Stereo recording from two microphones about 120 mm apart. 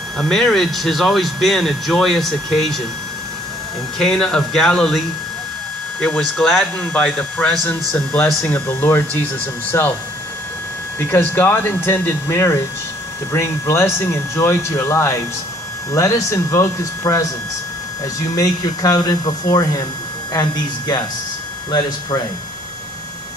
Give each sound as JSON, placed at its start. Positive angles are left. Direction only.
{"t": 0.2, "sound": "speech", "side_deg": 5}
{"t": 4.0, "sound": "speech", "side_deg": 5}
{"t": 11.0, "sound": "speech", "side_deg": 20}